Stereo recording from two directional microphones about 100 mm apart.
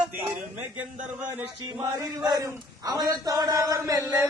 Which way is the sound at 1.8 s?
40° right (ahead or behind).